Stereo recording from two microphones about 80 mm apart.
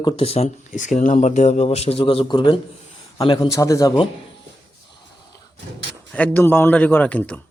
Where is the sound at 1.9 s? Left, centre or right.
Left.